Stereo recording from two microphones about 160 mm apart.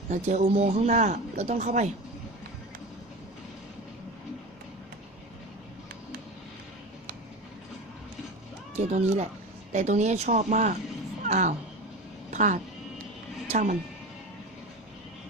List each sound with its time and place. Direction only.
0.1 s speech: 50° right (ahead or behind)
8.7 s speech: 45° right (ahead or behind)